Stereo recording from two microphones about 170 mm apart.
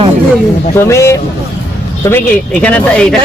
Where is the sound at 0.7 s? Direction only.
15° left (ahead or behind).